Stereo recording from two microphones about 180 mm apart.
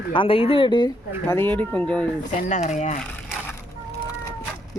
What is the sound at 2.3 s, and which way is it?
Speech, 40° left (ahead or behind).